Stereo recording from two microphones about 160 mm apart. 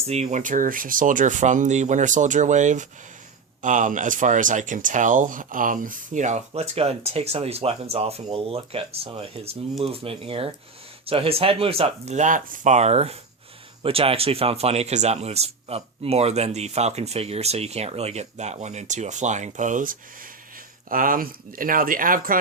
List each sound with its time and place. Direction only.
0.1 s speech: 45° right (ahead or behind)